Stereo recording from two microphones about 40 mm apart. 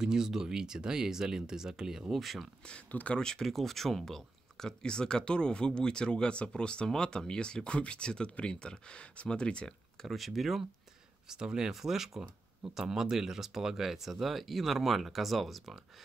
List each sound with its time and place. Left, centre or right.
0.0 s speech: centre
2.1 s speech: centre
2.9 s speech: left
3.2 s speech: centre
3.4 s speech: centre; by 9.7 s left
10.0 s speech: centre
11.2 s speech: centre